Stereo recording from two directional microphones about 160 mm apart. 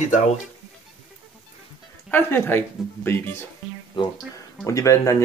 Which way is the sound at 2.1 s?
15° left (ahead or behind).